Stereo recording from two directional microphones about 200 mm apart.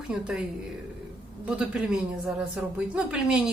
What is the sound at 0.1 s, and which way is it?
Speech, 5° right (ahead or behind).